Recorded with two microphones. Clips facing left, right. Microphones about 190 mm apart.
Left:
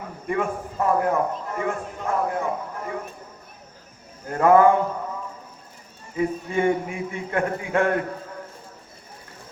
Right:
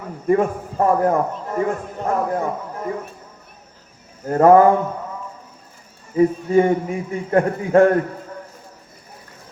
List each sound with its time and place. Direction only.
0.3 s a man's voice: 40° right (ahead or behind)
4.3 s a man's voice: 40° right (ahead or behind)
6.1 s a man's voice: 35° right (ahead or behind)